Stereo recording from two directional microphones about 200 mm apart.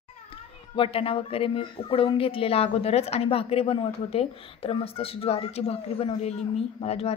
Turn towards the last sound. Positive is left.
turn(degrees=30)  # may be behind; listen again after turning